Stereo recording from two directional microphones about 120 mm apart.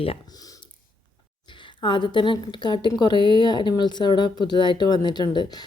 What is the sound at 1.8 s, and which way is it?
Speech, 40° left (ahead or behind).